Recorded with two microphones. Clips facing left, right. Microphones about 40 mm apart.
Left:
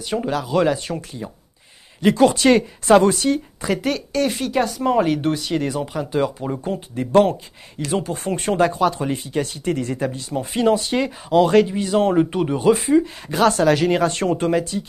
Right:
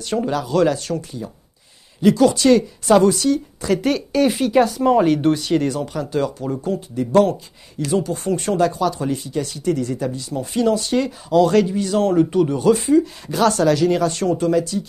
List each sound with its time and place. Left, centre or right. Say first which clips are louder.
0.0 s speech: right 1 dB; centre; by 3.3 s left
3.8 s speech: right 4 dB; centre; by 14.8 s left